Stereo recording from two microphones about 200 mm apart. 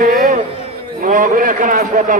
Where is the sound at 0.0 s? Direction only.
45° right (ahead or behind).